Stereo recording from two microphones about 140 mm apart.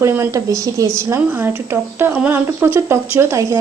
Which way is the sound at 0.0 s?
20° right (ahead or behind).